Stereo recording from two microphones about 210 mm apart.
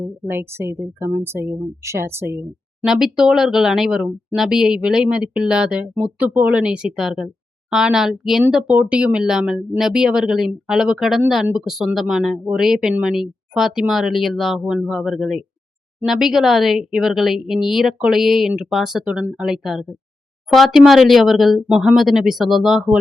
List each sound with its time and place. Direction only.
0.3 s a woman's voice: 10° right (ahead or behind)